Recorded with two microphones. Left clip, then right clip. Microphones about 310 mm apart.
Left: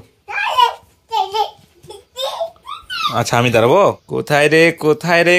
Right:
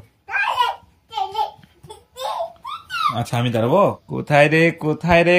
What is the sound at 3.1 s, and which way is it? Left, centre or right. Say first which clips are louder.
Speech: left 12 dB; centre.